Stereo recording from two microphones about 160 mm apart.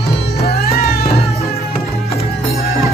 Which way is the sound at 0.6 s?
75° left (ahead or behind).